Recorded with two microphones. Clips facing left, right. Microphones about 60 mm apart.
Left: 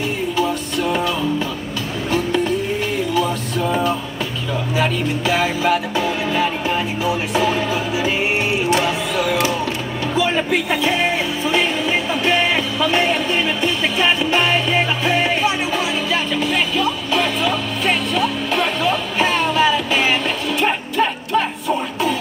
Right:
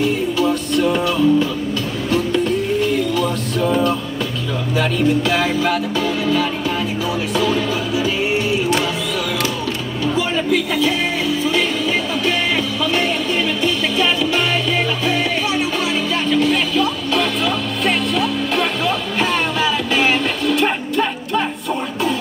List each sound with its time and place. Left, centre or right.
0.4 s music: centre
6.0 s music: left
10.3 s music: left
12.9 s a sound: left
13.9 s music: left
16.3 s music: centre